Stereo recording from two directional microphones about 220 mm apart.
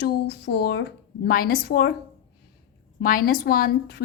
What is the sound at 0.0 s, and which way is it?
A woman's voice, 50° left (ahead or behind).